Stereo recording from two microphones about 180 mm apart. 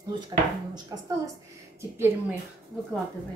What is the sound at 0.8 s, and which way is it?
A woman's voice, 20° right (ahead or behind).